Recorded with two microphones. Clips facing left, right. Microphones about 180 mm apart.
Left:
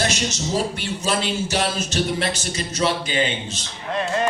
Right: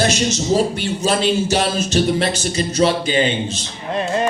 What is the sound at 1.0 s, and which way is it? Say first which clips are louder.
Speech: right 6 dB; 30° right (ahead or behind).